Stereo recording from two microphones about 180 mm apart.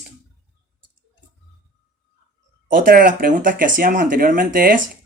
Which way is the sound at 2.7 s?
50° right (ahead or behind).